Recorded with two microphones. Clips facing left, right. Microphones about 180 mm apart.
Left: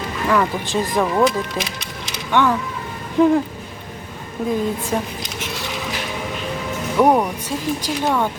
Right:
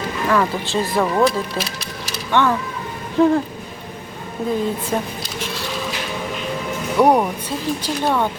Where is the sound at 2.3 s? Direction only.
15° left (ahead or behind).